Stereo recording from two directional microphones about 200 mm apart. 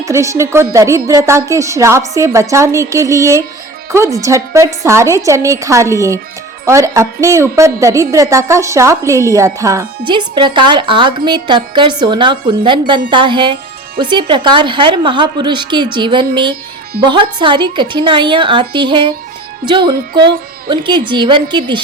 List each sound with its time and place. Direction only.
0.0 s a woman's voice: 15° right (ahead or behind)